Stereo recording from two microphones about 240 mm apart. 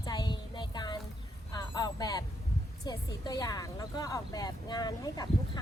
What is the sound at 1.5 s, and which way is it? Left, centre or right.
Vehicle, centre.